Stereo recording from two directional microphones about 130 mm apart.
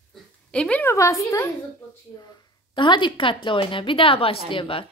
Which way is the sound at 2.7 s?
40° left (ahead or behind).